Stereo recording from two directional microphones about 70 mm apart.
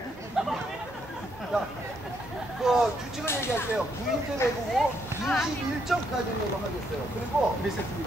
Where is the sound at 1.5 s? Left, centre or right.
Centre.